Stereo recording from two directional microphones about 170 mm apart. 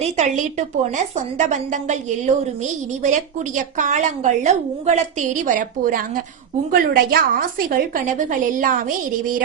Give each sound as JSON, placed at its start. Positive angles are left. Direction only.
{"t": 0.0, "sound": "a woman's voice", "side_deg": -45}